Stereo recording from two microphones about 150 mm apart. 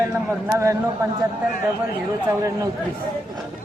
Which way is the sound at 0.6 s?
20° right (ahead or behind).